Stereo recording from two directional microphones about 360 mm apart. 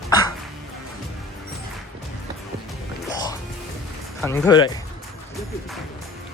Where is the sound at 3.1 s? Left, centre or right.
Centre.